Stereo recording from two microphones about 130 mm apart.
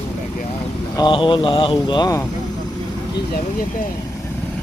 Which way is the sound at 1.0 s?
40° left (ahead or behind).